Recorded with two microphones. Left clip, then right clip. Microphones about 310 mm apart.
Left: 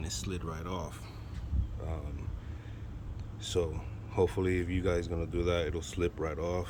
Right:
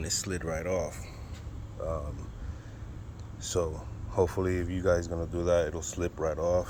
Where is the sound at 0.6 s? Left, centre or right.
Centre.